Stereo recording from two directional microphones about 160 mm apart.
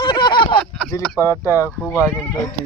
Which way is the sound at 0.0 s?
30° left (ahead or behind).